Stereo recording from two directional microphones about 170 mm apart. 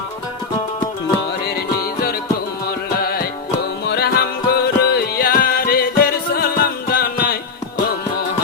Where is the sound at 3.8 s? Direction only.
70° left (ahead or behind).